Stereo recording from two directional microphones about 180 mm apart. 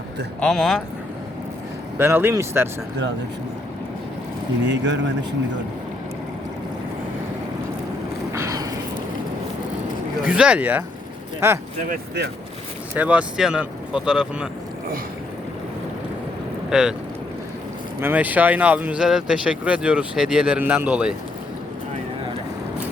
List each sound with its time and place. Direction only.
0.4 s speech: centre (ahead or behind)
2.0 s speech: 15° right (ahead or behind)
4.6 s speech: 75° right (ahead or behind)
8.3 s a sound: 15° right (ahead or behind)
10.2 s speech: 5° right (ahead or behind)
12.9 s speech: 10° right (ahead or behind)
16.6 s speech: 5° right (ahead or behind)
18.0 s speech: 10° right (ahead or behind)